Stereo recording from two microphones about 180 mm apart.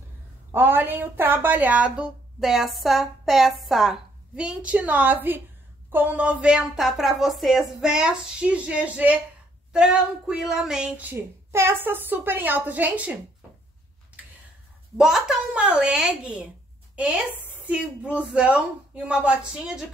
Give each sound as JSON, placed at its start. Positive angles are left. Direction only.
{"t": 0.5, "sound": "a woman's voice", "side_deg": -10}
{"t": 14.2, "sound": "tick-tock", "side_deg": -10}
{"t": 15.0, "sound": "a woman's voice", "side_deg": -5}